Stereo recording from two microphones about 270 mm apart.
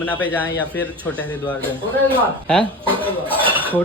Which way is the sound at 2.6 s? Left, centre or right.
Centre.